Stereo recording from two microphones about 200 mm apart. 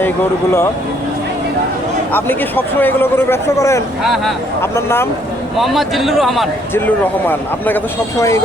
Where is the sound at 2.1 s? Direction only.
10° left (ahead or behind).